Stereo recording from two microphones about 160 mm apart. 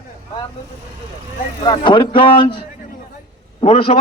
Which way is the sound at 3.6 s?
35° left (ahead or behind).